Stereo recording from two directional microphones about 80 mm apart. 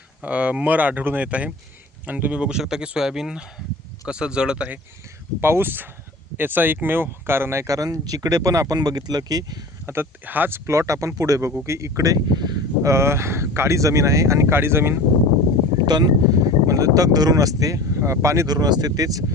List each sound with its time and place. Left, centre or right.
0.2 s speech: centre
5.4 s speech: right
9.8 s speech: right
10.7 s speech: right
12.8 s speech: right
15.9 s speech: right
16.6 s speech: right
18.4 s speech: right